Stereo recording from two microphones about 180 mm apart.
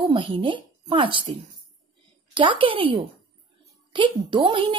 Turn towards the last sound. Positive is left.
turn(degrees=-30)  # may be behind; listen again after turning